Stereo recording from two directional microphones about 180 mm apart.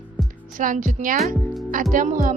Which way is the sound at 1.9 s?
45° right (ahead or behind).